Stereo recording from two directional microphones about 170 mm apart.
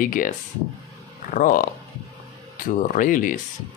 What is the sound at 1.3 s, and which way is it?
Speech, 55° left (ahead or behind).